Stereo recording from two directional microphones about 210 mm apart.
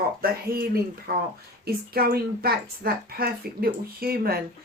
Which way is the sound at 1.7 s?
45° right (ahead or behind).